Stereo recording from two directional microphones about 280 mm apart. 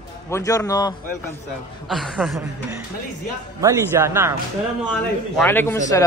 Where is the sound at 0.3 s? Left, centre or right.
Centre.